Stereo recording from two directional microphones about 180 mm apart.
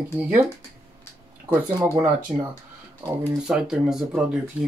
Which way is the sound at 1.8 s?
25° right (ahead or behind).